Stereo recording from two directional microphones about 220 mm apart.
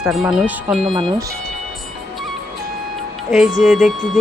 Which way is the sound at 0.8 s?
25° right (ahead or behind).